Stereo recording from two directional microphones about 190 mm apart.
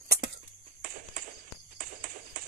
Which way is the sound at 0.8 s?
45° right (ahead or behind).